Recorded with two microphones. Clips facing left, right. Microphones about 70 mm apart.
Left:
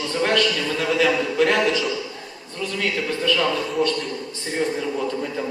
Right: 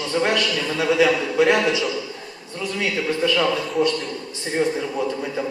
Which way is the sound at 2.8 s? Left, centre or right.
Centre.